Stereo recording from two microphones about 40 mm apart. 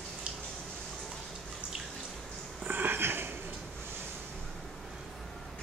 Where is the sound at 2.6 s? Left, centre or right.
Right.